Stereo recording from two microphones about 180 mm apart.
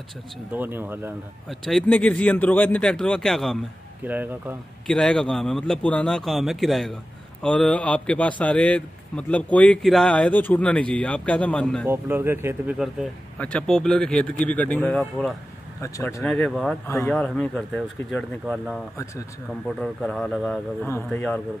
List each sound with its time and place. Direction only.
0.5 s speech: 10° right (ahead or behind)
1.5 s speech: centre (ahead or behind)
4.0 s speech: 10° right (ahead or behind)
4.8 s a man's voice: 5° left (ahead or behind)
11.8 s speech: 10° right (ahead or behind)
12.7 s speech: centre (ahead or behind)
15.8 s a man's voice: 15° left (ahead or behind)
16.8 s a man's voice: 15° left (ahead or behind)
17.1 s speech: 5° left (ahead or behind)
19.8 s a man's voice: centre (ahead or behind)